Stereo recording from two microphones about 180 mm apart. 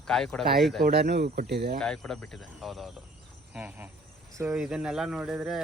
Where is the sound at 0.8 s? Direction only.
65° right (ahead or behind).